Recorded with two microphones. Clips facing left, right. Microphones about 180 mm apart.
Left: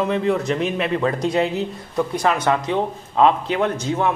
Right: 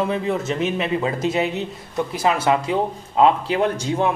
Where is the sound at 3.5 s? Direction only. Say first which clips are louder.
Right 1 dB; 30° right (ahead or behind).